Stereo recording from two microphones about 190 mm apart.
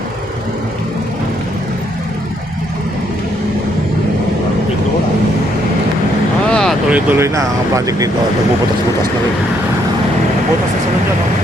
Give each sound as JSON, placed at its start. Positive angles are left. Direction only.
{"t": 6.5, "sound": "vehicle", "side_deg": 5}
{"t": 6.9, "sound": "speech", "side_deg": -10}